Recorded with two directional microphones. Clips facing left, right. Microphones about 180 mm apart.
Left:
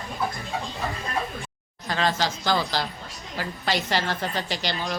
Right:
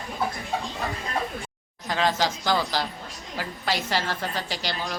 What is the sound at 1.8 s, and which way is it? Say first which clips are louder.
A woman's voice: right 1 dB; 15° right (ahead or behind).